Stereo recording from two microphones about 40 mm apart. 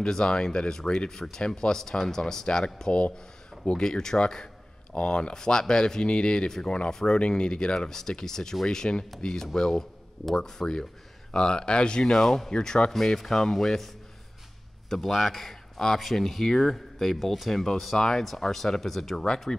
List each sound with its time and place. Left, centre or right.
0.0 s speech: left
2.4 s speech: left
12.0 s speech: centre
14.9 s speech: centre